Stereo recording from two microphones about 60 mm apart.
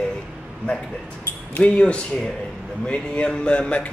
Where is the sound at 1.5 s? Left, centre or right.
Left.